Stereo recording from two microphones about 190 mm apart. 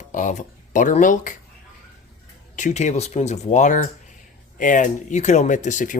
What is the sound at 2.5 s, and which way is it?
Speech, 40° left (ahead or behind).